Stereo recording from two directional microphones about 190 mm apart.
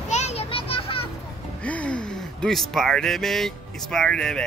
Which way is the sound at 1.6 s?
5° left (ahead or behind).